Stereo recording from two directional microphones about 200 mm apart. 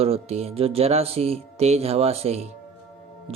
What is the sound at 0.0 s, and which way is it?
Speech, 30° right (ahead or behind).